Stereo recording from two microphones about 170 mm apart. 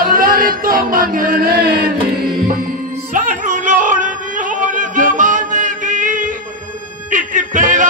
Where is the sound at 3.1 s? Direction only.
45° right (ahead or behind).